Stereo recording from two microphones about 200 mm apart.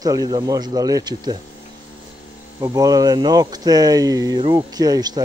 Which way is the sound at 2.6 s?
20° right (ahead or behind).